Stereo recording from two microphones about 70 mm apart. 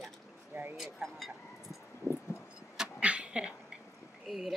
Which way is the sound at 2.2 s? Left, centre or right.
Left.